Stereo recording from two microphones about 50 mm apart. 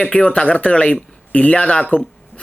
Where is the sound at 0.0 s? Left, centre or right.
Left.